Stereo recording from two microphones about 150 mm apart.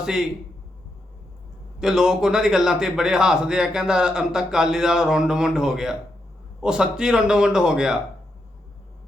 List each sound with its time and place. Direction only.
0.0 s a man's voice: 5° right (ahead or behind)
1.8 s a man's voice: 5° right (ahead or behind)